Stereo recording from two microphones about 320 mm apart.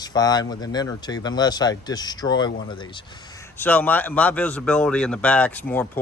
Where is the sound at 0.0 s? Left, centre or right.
Centre.